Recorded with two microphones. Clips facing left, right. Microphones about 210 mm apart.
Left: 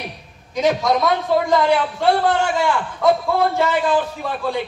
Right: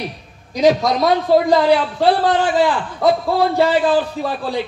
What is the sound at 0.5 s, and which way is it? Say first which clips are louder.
A man's voice: right 3 dB; 35° right (ahead or behind).